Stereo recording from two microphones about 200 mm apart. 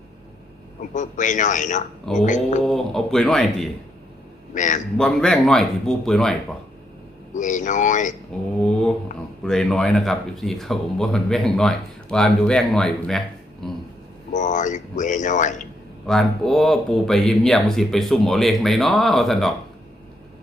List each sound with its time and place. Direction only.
0.8 s speech: 40° left (ahead or behind)
2.6 s speech: centre (ahead or behind)
4.5 s speech: 40° left (ahead or behind)
4.9 s speech: 5° left (ahead or behind)
7.3 s speech: 40° left (ahead or behind)
8.3 s speech: 5° left (ahead or behind)
14.3 s speech: 40° left (ahead or behind)
16.0 s speech: centre (ahead or behind)